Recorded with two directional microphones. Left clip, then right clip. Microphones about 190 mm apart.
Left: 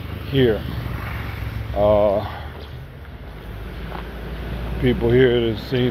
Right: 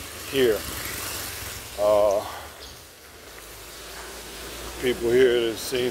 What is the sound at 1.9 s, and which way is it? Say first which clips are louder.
Speech: left 2 dB; 15° right (ahead or behind).